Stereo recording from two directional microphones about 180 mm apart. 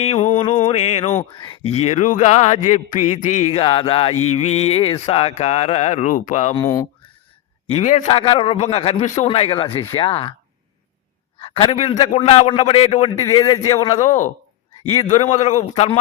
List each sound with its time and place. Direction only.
0.0 s mantra: 40° left (ahead or behind)
1.4 s speech: 30° left (ahead or behind)
6.5 s speech: 15° left (ahead or behind)
7.7 s speech: 40° left (ahead or behind)
8.0 s a man's voice: 30° left (ahead or behind)
11.3 s speech: 30° left (ahead or behind)
13.2 s a man's voice: 20° left (ahead or behind)
14.0 s speech: 40° left (ahead or behind)